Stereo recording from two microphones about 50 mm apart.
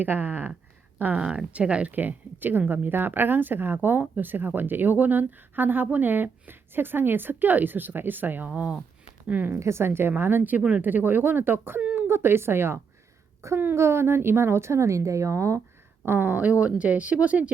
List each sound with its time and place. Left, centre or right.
0.0 s speech: right
1.1 s speech: centre
1.9 s speech: right
8.4 s speech: right
9.6 s a woman's voice: right
13.4 s a woman's voice: right
13.7 s speech: right
16.0 s speech: right